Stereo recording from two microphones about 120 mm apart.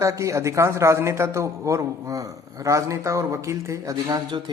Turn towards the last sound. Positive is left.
turn(degrees=-30)  # may be behind; listen again after turning